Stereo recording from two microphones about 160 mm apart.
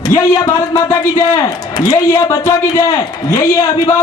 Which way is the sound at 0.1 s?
25° left (ahead or behind).